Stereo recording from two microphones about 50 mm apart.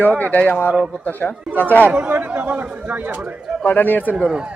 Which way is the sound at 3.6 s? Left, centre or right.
Left.